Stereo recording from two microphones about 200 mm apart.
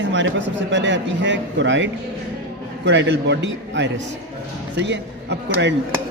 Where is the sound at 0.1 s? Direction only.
65° right (ahead or behind).